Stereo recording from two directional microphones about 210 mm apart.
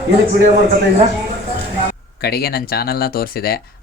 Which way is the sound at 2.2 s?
50° left (ahead or behind).